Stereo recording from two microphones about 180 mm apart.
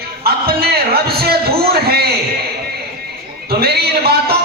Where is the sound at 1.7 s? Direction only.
60° right (ahead or behind).